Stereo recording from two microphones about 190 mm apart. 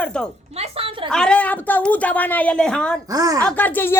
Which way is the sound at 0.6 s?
30° right (ahead or behind).